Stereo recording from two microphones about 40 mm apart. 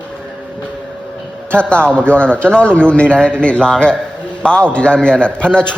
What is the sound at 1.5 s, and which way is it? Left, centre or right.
A man's voice, left.